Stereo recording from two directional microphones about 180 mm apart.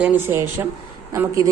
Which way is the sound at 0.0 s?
10° right (ahead or behind).